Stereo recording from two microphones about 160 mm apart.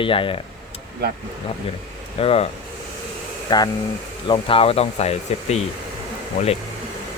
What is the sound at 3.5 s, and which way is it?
Speech, 25° left (ahead or behind).